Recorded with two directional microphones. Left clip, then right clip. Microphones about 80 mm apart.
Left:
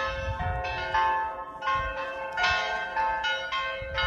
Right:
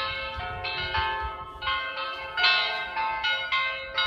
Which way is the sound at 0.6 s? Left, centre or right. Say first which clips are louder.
Left 2 dB; left.